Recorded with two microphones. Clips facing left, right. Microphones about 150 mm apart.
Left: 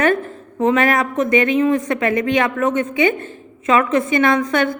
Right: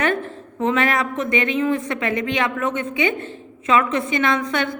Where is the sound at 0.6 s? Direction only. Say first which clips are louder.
Left 4 dB; 40° left (ahead or behind).